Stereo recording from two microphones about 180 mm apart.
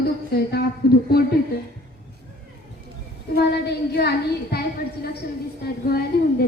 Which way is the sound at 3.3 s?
65° left (ahead or behind).